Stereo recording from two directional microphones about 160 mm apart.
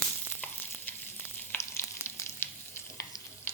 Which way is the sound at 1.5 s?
15° left (ahead or behind).